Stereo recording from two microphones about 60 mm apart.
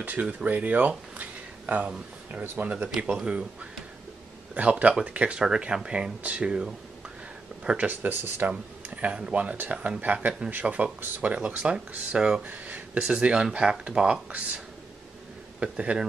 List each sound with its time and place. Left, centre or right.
0.0 s speech: right
4.6 s speech: right
8.5 s speech: right
12.4 s a sound: right
13.0 s speech: centre
15.6 s speech: centre